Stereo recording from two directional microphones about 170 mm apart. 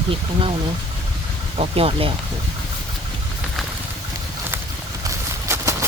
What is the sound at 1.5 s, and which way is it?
Speech, 35° right (ahead or behind).